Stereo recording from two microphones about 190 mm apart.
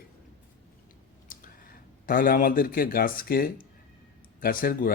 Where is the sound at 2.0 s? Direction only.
50° left (ahead or behind).